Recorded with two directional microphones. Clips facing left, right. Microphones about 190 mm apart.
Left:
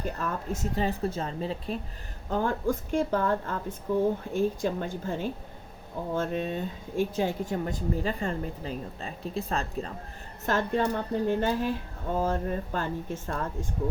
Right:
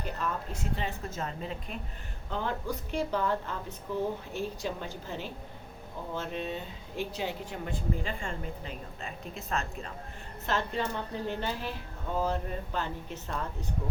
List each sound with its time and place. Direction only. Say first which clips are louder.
0.0 s speech: left 2 dB; 45° left (ahead or behind)
2.3 s a woman's voice: left 6 dB; 50° left (ahead or behind)
10.4 s a woman's voice: left 5 dB; 50° left (ahead or behind)